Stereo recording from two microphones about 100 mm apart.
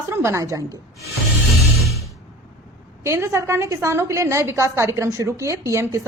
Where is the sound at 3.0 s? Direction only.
25° right (ahead or behind).